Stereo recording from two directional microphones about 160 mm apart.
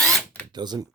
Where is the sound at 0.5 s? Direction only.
25° right (ahead or behind).